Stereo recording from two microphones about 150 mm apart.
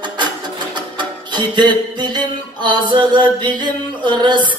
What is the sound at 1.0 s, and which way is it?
Music, 30° right (ahead or behind).